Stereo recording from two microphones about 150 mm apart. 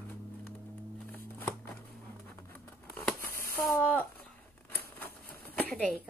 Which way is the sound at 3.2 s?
85° right.